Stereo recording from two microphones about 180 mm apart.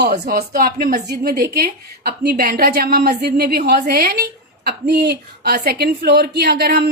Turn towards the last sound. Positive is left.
turn(degrees=-60)  # may be behind; listen again after turning